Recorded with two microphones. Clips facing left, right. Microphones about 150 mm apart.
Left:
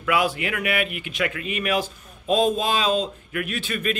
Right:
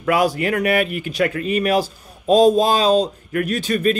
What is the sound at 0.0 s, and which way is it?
Speech, 40° right (ahead or behind).